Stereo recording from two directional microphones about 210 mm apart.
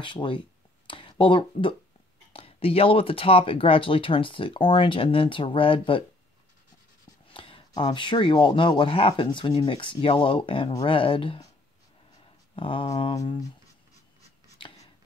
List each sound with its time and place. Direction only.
0.0 s speech: 25° left (ahead or behind)
7.3 s speech: 25° left (ahead or behind)
12.5 s speech: 25° left (ahead or behind)